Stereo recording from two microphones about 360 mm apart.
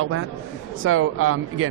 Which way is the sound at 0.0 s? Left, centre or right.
Right.